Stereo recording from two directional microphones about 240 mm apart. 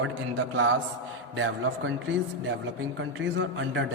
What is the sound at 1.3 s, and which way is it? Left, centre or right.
Speech, right.